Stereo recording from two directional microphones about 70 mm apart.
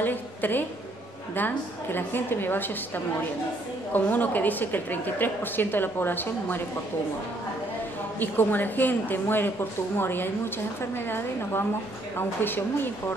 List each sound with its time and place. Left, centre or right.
0.0 s a woman's voice: left
8.2 s a woman's voice: left